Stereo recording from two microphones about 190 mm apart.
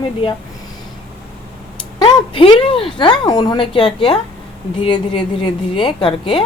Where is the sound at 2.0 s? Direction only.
30° left (ahead or behind).